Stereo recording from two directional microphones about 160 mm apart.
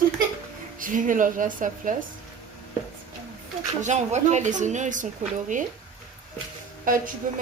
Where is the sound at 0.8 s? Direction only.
55° right (ahead or behind).